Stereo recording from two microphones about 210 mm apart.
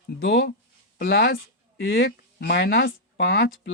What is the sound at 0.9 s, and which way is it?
Speech, 50° left (ahead or behind).